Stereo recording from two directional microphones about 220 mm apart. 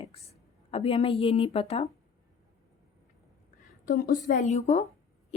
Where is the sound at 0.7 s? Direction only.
25° left (ahead or behind).